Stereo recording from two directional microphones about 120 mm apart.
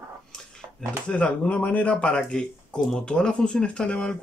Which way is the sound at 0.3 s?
5° left (ahead or behind).